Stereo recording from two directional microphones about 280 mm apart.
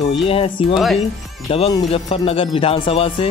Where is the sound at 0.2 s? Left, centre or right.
Centre.